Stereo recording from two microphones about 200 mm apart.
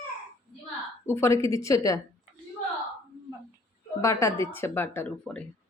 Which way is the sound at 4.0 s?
15° left (ahead or behind).